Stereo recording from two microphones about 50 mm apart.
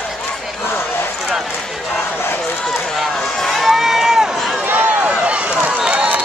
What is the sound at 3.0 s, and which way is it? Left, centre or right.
Run, centre.